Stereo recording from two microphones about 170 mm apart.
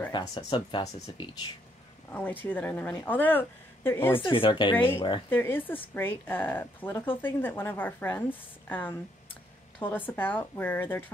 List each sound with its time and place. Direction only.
0.1 s speech: 25° left (ahead or behind)
2.5 s speech: 10° left (ahead or behind)
4.2 s speech: 30° left (ahead or behind)
5.3 s speech: 10° left (ahead or behind)